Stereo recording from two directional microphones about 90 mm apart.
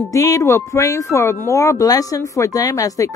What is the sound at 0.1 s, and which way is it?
Speech, 40° left (ahead or behind).